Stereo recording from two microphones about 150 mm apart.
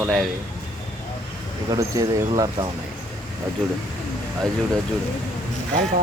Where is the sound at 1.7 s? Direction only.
25° right (ahead or behind).